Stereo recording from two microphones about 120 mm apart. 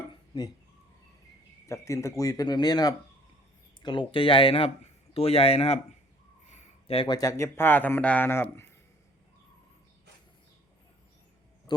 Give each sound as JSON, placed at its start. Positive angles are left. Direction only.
{"t": 0.1, "sound": "dishes", "side_deg": 35}
{"t": 1.6, "sound": "speech", "side_deg": 25}
{"t": 3.8, "sound": "speech", "side_deg": 45}
{"t": 6.5, "sound": "a sound", "side_deg": 75}
{"t": 7.1, "sound": "speech", "side_deg": 30}